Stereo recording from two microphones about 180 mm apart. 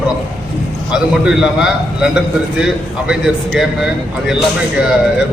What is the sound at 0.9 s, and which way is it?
A man's voice, 5° right (ahead or behind).